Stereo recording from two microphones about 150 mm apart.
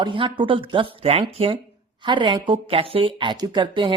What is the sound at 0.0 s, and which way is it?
Speech, 30° right (ahead or behind).